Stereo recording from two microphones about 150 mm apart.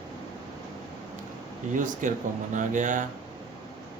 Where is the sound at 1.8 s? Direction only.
60° right (ahead or behind).